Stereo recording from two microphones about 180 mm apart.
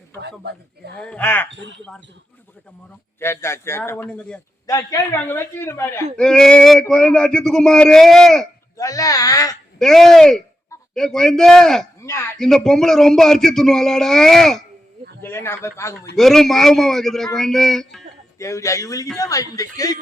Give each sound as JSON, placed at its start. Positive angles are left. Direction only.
{"t": 0.2, "sound": "speech", "side_deg": -65}
{"t": 1.0, "sound": "a man's voice", "side_deg": 10}
{"t": 1.5, "sound": "speech", "side_deg": -90}
{"t": 3.2, "sound": "a man's voice", "side_deg": 15}
{"t": 4.6, "sound": "a man's voice", "side_deg": 20}
{"t": 6.1, "sound": "a sound", "side_deg": 5}
{"t": 8.8, "sound": "speech", "side_deg": 20}
{"t": 9.7, "sound": "a sound", "side_deg": 0}
{"t": 12.0, "sound": "speech", "side_deg": 15}
{"t": 12.4, "sound": "a sound", "side_deg": 5}
{"t": 15.2, "sound": "a man's voice", "side_deg": 15}
{"t": 16.1, "sound": "a sound", "side_deg": 0}
{"t": 18.3, "sound": "a man's voice", "side_deg": 15}